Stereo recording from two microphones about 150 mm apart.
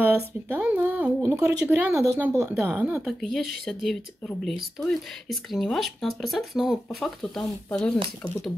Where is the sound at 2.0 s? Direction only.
20° right (ahead or behind).